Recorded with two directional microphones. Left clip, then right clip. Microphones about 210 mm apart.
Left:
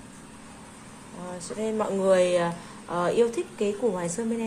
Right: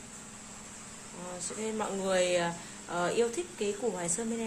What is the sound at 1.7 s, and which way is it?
Speech, 10° left (ahead or behind).